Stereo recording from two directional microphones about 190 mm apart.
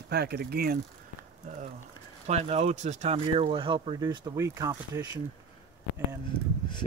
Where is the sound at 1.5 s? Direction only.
40° right (ahead or behind); by 5.2 s 20° right (ahead or behind).